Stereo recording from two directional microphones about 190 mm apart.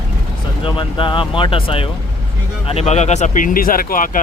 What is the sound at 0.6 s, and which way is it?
Speech, 25° left (ahead or behind).